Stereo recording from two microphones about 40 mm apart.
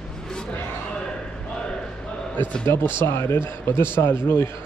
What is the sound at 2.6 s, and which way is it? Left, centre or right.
A man's voice, left.